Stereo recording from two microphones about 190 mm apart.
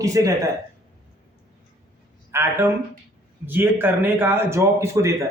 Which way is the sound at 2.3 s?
10° right (ahead or behind).